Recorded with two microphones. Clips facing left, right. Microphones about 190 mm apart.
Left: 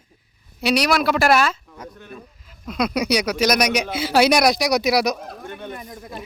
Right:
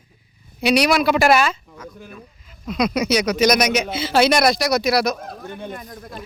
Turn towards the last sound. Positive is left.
turn(degrees=5)  # may be behind; listen again after turning